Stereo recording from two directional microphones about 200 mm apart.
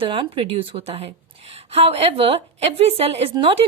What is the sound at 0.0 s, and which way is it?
A woman's voice, 25° right (ahead or behind).